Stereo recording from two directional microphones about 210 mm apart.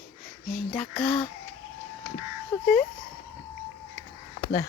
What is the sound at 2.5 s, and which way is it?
Speech, 15° left (ahead or behind).